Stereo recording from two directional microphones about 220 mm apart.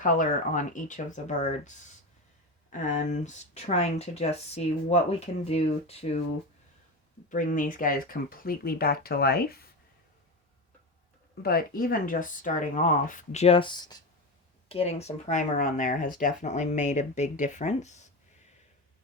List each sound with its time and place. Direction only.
0.0 s speech: 35° left (ahead or behind)
7.3 s speech: 35° left (ahead or behind)
11.4 s speech: 40° left (ahead or behind)